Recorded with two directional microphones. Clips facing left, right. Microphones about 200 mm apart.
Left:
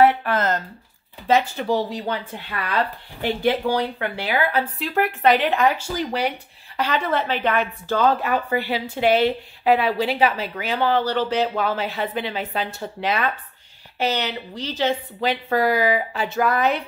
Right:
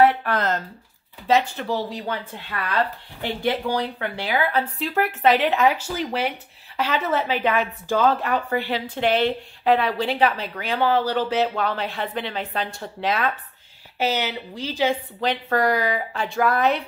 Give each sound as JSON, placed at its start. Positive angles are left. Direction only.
{"t": 0.0, "sound": "speech", "side_deg": 5}
{"t": 1.6, "sound": "speech", "side_deg": 15}
{"t": 3.2, "sound": "a woman's voice", "side_deg": 10}
{"t": 15.1, "sound": "a woman's voice", "side_deg": 5}